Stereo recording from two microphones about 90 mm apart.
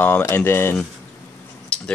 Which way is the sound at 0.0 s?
25° left (ahead or behind).